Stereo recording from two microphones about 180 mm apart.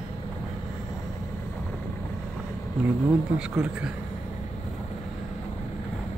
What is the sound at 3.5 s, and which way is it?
Speech, 5° right (ahead or behind).